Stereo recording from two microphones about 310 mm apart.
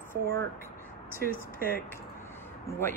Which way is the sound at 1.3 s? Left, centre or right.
Left.